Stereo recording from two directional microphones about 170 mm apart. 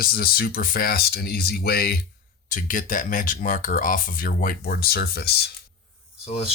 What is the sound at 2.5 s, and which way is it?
Speech, 50° left (ahead or behind).